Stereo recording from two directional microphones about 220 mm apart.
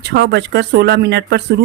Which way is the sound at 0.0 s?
50° right (ahead or behind).